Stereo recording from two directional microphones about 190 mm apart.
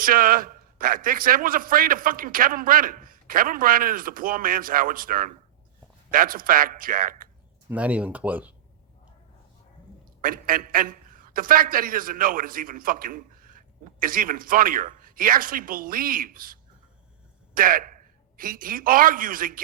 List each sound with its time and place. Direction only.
0.0 s a man's voice: 50° right (ahead or behind)
7.7 s speech: 5° right (ahead or behind)
10.2 s a man's voice: 45° right (ahead or behind)